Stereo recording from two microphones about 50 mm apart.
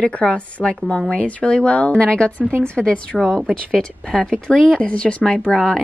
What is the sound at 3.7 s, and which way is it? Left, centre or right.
A woman's voice, centre.